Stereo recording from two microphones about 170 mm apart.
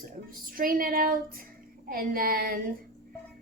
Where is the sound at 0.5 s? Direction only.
55° right (ahead or behind).